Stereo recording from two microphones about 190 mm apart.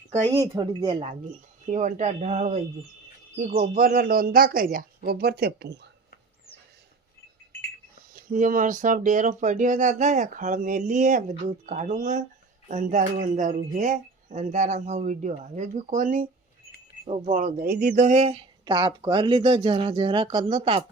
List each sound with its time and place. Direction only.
0.6 s speech: 25° right (ahead or behind)
1.7 s speech: 40° right (ahead or behind); by 5.9 s 65° right (ahead or behind)
8.1 s speech: 45° right (ahead or behind)
18.6 s speech: 20° right (ahead or behind)